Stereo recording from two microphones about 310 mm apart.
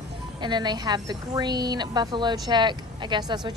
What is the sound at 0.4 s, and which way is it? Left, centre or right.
A woman's voice, centre.